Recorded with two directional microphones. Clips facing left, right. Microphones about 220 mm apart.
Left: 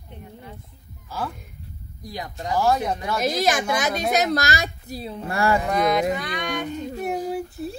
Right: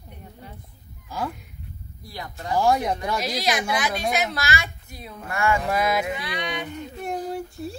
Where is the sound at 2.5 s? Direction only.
15° right (ahead or behind).